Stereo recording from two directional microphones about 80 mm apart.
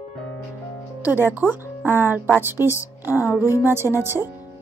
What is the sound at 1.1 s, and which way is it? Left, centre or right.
A woman's voice, right.